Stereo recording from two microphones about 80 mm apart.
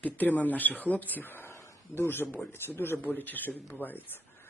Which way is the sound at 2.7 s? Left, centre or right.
Left.